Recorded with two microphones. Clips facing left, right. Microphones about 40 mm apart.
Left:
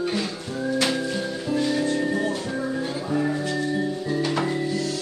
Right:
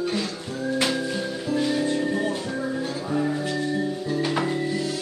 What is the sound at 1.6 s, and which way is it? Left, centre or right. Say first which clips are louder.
Music: even; centre.